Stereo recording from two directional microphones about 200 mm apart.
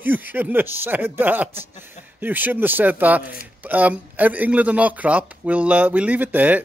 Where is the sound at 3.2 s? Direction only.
45° left (ahead or behind).